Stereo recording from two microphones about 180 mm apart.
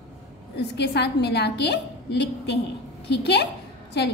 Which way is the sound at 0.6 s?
70° left (ahead or behind).